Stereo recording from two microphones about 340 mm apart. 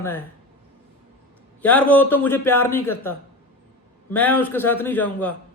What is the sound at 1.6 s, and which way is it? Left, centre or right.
A man's voice, centre.